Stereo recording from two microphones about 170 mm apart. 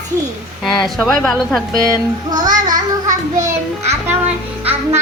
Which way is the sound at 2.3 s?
25° right (ahead or behind).